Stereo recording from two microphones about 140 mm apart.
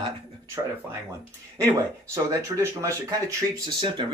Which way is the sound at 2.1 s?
20° right (ahead or behind).